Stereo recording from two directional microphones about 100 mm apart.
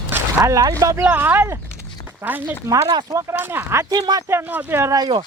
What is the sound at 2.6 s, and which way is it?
Speech, 40° right (ahead or behind).